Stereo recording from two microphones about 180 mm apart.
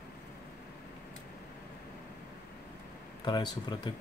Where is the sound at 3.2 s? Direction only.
25° left (ahead or behind).